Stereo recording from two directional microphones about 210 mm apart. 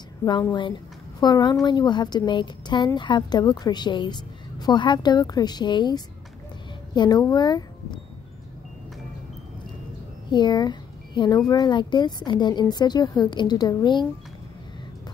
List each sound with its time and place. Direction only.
0.2 s a woman's voice: 15° left (ahead or behind)
10.3 s a woman's voice: 20° left (ahead or behind)